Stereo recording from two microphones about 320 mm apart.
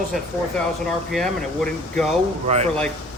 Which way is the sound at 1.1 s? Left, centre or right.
Centre.